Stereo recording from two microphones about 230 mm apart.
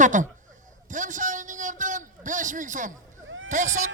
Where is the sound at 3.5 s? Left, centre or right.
Right.